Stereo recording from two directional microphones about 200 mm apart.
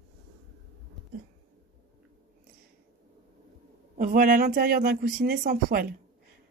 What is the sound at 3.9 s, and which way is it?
Speech, 40° right (ahead or behind).